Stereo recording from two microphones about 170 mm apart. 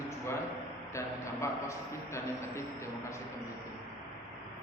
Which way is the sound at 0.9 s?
15° left (ahead or behind).